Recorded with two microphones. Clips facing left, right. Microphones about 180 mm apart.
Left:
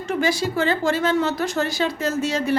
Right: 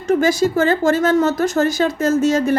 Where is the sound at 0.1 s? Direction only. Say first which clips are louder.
Right 7 dB; 45° right (ahead or behind).